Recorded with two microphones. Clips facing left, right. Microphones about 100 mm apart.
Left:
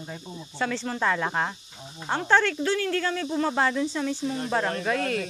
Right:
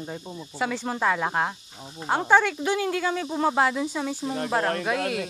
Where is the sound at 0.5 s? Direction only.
10° right (ahead or behind).